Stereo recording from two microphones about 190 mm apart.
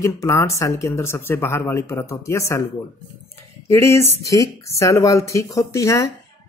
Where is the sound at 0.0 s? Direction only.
15° left (ahead or behind).